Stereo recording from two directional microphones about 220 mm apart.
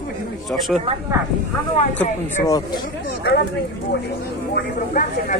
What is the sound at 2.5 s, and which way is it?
Speech, 15° left (ahead or behind).